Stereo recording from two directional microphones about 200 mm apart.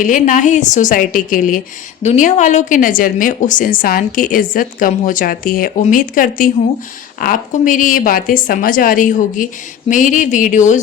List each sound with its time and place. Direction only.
0.0 s a woman's voice: 40° left (ahead or behind)